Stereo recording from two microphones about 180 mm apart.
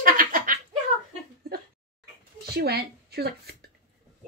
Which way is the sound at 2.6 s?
60° right (ahead or behind).